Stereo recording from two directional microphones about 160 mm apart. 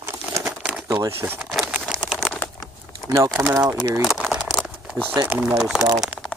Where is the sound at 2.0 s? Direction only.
Centre (ahead or behind).